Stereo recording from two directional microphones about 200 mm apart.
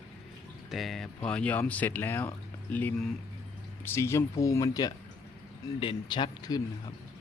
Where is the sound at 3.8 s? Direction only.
15° left (ahead or behind).